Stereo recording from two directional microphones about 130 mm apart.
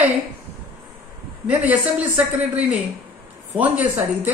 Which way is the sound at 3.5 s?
15° right (ahead or behind).